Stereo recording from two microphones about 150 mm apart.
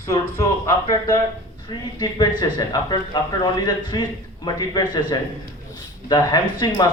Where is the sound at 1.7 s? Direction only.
30° left (ahead or behind).